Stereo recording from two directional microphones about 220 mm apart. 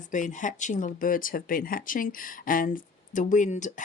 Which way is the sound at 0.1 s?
35° left (ahead or behind).